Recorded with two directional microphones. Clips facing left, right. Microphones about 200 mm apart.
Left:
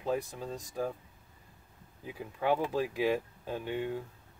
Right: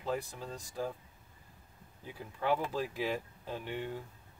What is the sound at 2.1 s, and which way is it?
Speech, 10° left (ahead or behind).